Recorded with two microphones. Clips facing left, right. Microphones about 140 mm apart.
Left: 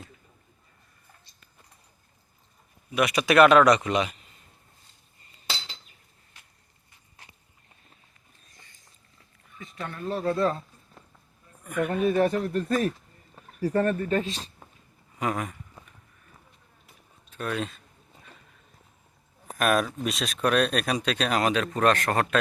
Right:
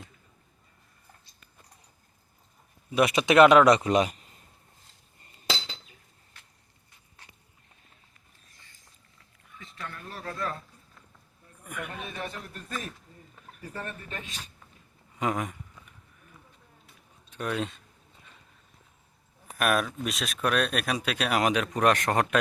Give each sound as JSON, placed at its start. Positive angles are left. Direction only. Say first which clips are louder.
{"t": 2.9, "sound": "speech", "louder": "even", "side_deg": -30}
{"t": 9.7, "sound": "speech", "louder": "left 10 dB", "side_deg": 25}
{"t": 11.9, "sound": "speech", "louder": "left 19 dB", "side_deg": 45}
{"t": 13.3, "sound": "a sound", "louder": "left 16 dB", "side_deg": 35}
{"t": 14.0, "sound": "speech", "louder": "left 14 dB", "side_deg": 40}
{"t": 15.2, "sound": "speech", "louder": "even", "side_deg": -20}
{"t": 17.3, "sound": "speech", "louder": "even", "side_deg": -15}
{"t": 19.5, "sound": "speech", "louder": "left 2 dB", "side_deg": 0}